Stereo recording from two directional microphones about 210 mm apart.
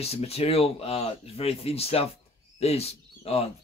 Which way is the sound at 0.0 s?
30° left (ahead or behind).